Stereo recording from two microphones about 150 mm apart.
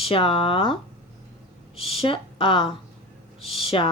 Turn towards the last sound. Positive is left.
turn(degrees=40)  # may be behind; listen again after turning